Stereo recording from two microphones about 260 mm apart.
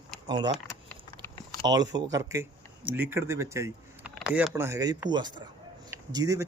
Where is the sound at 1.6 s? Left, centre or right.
Centre.